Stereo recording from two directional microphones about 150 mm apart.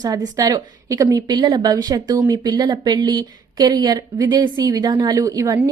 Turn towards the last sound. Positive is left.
turn(degrees=-20)  # may be behind; listen again after turning